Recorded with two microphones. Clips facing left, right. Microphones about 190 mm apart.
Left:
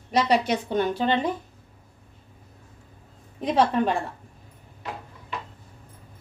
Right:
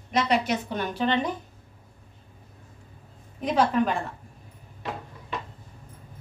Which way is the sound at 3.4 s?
30° left (ahead or behind).